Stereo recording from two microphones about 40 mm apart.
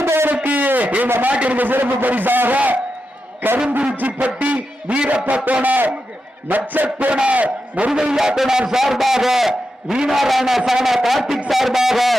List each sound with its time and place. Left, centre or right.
0.0 s a sound: right
0.4 s a sound: right
1.3 s a man's voice: right
2.6 s a man's voice: right
7.1 s a man's voice: right
7.9 s a man's voice: centre
10.2 s music: centre